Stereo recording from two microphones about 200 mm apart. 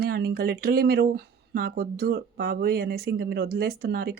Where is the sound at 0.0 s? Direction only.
50° right (ahead or behind).